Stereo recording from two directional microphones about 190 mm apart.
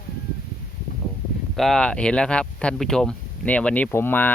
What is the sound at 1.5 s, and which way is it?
Speech, centre (ahead or behind).